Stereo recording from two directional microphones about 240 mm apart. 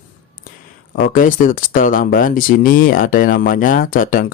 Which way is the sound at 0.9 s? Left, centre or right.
Left.